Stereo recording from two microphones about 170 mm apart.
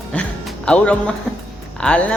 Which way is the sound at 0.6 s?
5° left (ahead or behind).